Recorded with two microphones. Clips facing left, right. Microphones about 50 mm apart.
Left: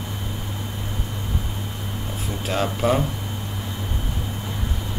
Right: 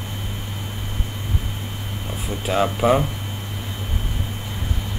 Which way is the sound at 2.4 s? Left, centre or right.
Centre.